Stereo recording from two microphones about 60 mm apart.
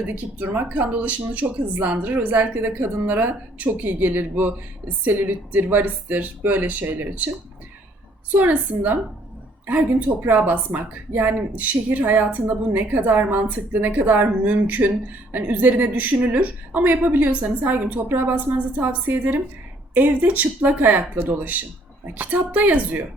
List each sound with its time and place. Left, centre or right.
0.3 s a woman's voice: right
8.3 s a woman's voice: right